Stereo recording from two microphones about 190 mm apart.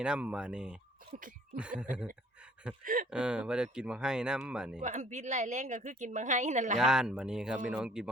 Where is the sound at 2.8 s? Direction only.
45° right (ahead or behind).